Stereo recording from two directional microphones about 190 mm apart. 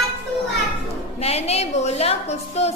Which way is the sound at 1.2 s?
35° left (ahead or behind).